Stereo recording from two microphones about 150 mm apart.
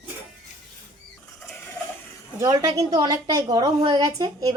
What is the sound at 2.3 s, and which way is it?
A woman's voice, 20° right (ahead or behind).